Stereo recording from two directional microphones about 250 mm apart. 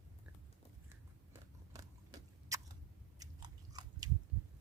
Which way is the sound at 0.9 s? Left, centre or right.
Centre.